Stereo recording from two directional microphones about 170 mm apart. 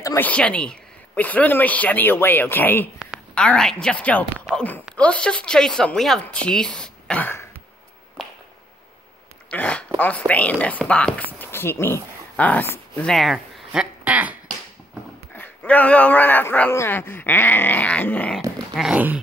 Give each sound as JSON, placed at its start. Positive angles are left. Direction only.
{"t": 0.0, "sound": "a man's voice", "side_deg": 15}
{"t": 9.5, "sound": "a sound", "side_deg": 5}
{"t": 9.9, "sound": "a man's voice", "side_deg": 10}
{"t": 13.1, "sound": "speech", "side_deg": 0}
{"t": 15.3, "sound": "a man's voice", "side_deg": 10}
{"t": 18.8, "sound": "speech", "side_deg": -5}